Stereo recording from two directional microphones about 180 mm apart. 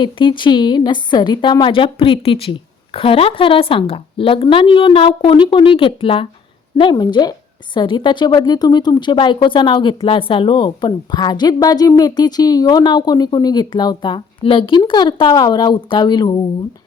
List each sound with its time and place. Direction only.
0.0 s a woman's voice: 25° left (ahead or behind)